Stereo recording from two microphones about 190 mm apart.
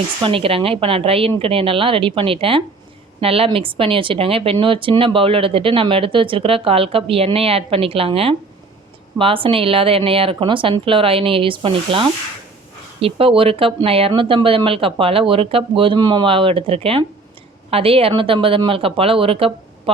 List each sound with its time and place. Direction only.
0.2 s speech: 30° right (ahead or behind)